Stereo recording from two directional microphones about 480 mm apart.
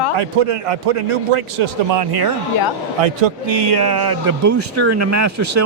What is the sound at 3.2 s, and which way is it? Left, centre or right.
A man's voice, right.